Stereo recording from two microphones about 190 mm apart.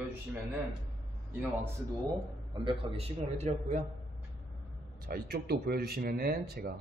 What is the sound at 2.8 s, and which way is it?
A man's voice, 30° right (ahead or behind).